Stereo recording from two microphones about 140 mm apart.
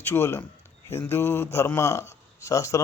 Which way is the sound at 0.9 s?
20° left (ahead or behind).